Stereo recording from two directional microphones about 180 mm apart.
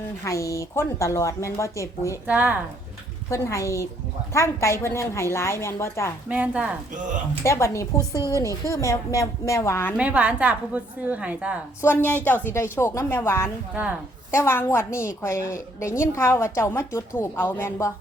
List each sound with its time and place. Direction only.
0.3 s a woman's voice: 15° left (ahead or behind)
2.2 s a woman's voice: 10° right (ahead or behind)
3.2 s a woman's voice: 15° left (ahead or behind)
6.2 s a woman's voice: 5° right (ahead or behind)
7.4 s a woman's voice: 15° left (ahead or behind)
10.0 s a woman's voice: 5° right (ahead or behind)
11.8 s a woman's voice: 10° left (ahead or behind)